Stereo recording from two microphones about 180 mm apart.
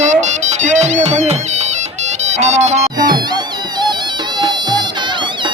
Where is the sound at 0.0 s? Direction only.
40° right (ahead or behind).